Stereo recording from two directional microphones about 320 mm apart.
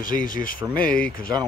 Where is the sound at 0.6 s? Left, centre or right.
Centre.